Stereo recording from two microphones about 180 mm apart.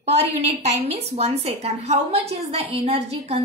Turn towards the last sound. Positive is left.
turn(degrees=-35)  # may be behind; listen again after turning